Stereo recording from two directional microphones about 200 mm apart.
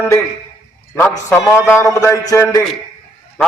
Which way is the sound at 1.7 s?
15° left (ahead or behind).